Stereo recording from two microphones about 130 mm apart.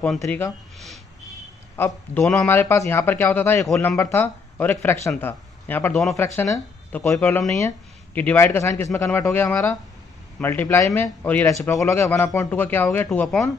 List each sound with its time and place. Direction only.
0.0 s speech: 10° left (ahead or behind)
1.8 s speech: 20° left (ahead or behind)